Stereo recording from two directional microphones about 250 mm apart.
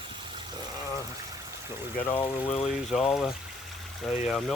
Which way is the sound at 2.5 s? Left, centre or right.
Left.